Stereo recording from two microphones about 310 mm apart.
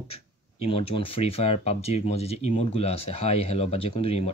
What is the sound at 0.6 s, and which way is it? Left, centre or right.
Speech, centre.